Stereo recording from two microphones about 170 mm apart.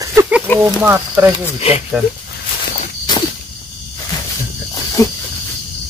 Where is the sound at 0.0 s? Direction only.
20° right (ahead or behind).